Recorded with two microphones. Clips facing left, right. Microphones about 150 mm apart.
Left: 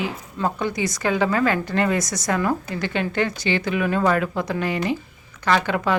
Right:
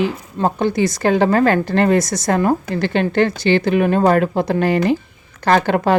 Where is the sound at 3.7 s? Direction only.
50° right (ahead or behind).